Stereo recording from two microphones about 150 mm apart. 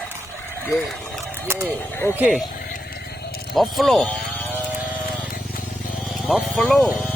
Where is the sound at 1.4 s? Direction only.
15° right (ahead or behind).